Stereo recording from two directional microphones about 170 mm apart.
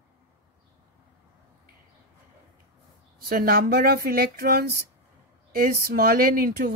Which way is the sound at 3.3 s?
60° right (ahead or behind).